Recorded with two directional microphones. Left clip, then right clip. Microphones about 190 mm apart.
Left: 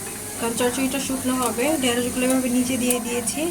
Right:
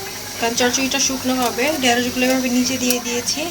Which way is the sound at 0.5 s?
Centre (ahead or behind).